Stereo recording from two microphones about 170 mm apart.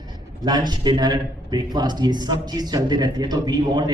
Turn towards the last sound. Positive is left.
turn(degrees=-25)  # may be behind; listen again after turning